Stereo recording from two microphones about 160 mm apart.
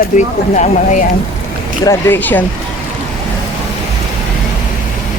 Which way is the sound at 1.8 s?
10° left (ahead or behind).